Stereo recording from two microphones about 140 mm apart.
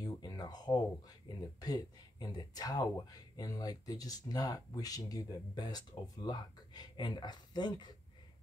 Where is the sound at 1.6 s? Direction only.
25° left (ahead or behind).